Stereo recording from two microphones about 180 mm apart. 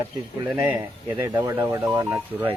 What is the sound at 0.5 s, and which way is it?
Speech, 10° right (ahead or behind).